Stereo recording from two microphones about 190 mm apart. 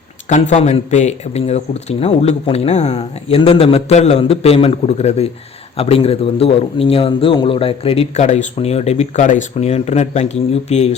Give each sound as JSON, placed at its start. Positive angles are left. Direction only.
{"t": 0.3, "sound": "speech", "side_deg": 40}